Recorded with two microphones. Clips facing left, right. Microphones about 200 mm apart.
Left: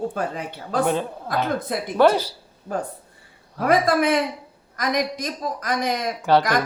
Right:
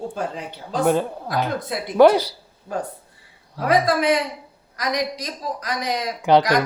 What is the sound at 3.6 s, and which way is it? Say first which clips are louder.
A man's voice: even; 55° left (ahead or behind).